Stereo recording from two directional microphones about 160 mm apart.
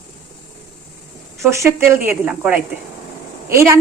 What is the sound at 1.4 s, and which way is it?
Speech, 15° right (ahead or behind).